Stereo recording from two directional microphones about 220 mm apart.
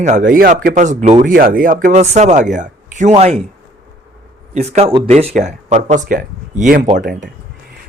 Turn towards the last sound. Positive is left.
turn(degrees=-40)  # may be behind; listen again after turning